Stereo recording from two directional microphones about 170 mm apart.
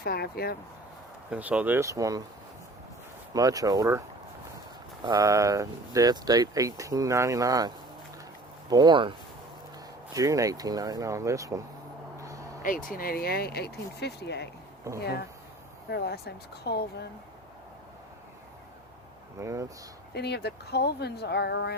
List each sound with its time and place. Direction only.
0.0 s speech: 65° left (ahead or behind)
1.3 s speech: 10° right (ahead or behind)
3.3 s speech: 20° right (ahead or behind)
5.0 s speech: 20° right (ahead or behind)
8.7 s speech: 25° right (ahead or behind)
12.2 s vehicle: 20° right (ahead or behind)
12.6 s speech: 55° left (ahead or behind); by 14.5 s 80° left
14.9 s speech: 15° right (ahead or behind)
15.9 s speech: 70° left (ahead or behind)
19.4 s speech: 20° right (ahead or behind)
20.1 s speech: 75° left (ahead or behind)